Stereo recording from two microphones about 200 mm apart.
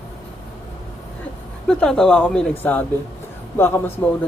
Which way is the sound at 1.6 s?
5° left (ahead or behind).